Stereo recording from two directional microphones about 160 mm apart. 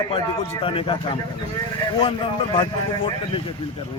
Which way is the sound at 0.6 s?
35° left (ahead or behind).